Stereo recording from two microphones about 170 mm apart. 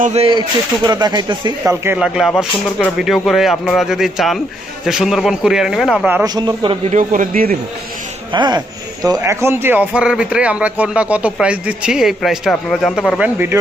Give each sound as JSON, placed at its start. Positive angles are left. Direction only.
{"t": 0.0, "sound": "speech", "side_deg": -40}
{"t": 1.8, "sound": "speech", "side_deg": -15}
{"t": 2.1, "sound": "speech", "side_deg": 0}
{"t": 6.2, "sound": "speech", "side_deg": -25}
{"t": 6.9, "sound": "speech", "side_deg": -50}
{"t": 8.3, "sound": "speech", "side_deg": -25}